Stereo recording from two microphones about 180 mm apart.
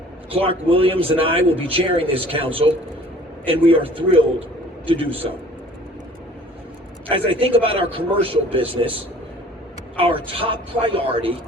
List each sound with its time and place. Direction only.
0.3 s a man's voice: 30° right (ahead or behind)
7.1 s a man's voice: 30° right (ahead or behind)
10.0 s a man's voice: 30° right (ahead or behind)